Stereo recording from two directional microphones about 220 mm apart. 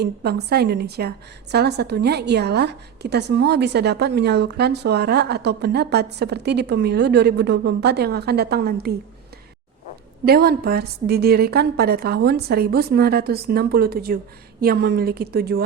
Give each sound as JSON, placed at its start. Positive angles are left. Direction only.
{"t": 0.0, "sound": "a woman's voice", "side_deg": -50}
{"t": 10.2, "sound": "a woman's voice", "side_deg": -45}